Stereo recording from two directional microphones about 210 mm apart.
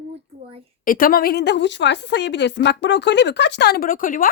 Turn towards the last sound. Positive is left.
turn(degrees=40)  # may be behind; listen again after turning